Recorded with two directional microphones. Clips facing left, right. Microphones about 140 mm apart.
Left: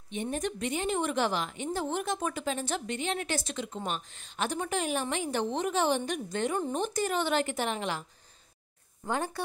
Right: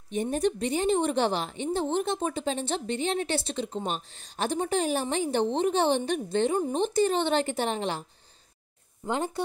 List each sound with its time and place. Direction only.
0.1 s a woman's voice: 40° right (ahead or behind)
9.0 s speech: 20° right (ahead or behind)